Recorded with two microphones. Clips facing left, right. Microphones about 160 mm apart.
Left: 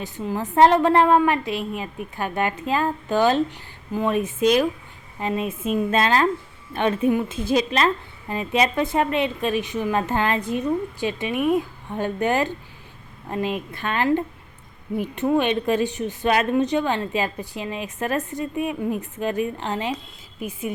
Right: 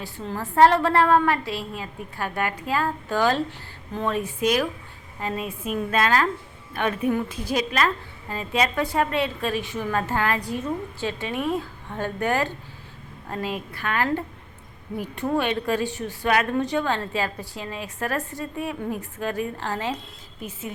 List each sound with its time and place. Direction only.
0.0 s a woman's voice: 15° left (ahead or behind)